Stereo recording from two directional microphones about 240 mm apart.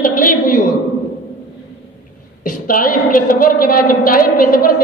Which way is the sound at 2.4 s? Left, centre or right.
Left.